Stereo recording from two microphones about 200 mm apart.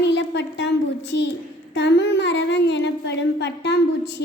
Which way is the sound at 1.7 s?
60° left (ahead or behind).